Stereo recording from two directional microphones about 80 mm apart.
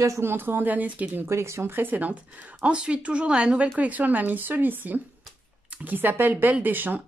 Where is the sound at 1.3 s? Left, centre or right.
Right.